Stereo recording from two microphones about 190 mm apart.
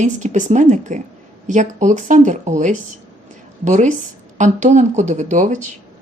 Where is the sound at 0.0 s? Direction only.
40° right (ahead or behind).